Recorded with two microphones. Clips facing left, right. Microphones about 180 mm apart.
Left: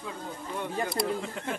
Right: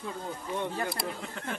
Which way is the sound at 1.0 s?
Centre (ahead or behind).